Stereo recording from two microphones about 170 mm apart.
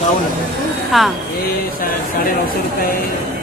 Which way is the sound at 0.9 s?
Centre (ahead or behind).